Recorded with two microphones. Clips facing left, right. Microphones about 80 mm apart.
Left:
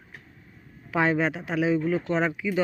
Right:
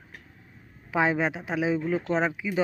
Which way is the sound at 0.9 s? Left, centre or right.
Centre.